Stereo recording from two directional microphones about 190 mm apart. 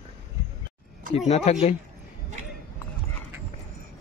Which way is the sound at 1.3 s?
35° left (ahead or behind).